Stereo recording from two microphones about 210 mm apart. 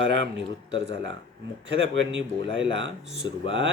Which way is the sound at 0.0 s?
60° right (ahead or behind).